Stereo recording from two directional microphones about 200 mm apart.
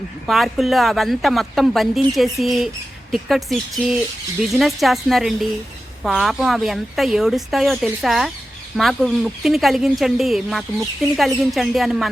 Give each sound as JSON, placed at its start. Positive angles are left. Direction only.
{"t": 0.3, "sound": "speech", "side_deg": 0}